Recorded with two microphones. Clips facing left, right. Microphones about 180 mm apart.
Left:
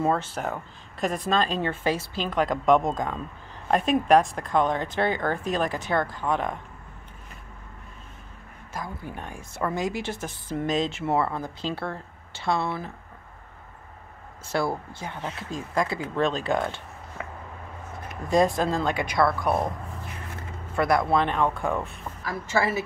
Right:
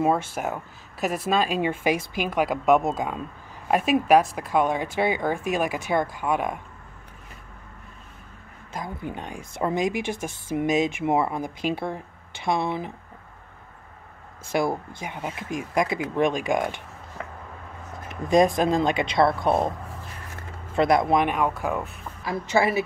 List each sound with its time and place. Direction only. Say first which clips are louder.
0.0 s speech: right 2 dB; 10° right (ahead or behind)
8.7 s speech: right 3 dB; 20° right (ahead or behind)
14.4 s speech: right 2 dB; 15° right (ahead or behind)
18.3 s speech: right 3 dB; 15° right (ahead or behind)
20.7 s speech: right 2 dB; 20° right (ahead or behind); by 21.9 s 5° right (ahead or behind)
22.2 s speech: right 3 dB; 20° right (ahead or behind)